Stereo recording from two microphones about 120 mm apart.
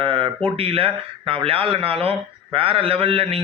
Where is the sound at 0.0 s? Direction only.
50° right (ahead or behind).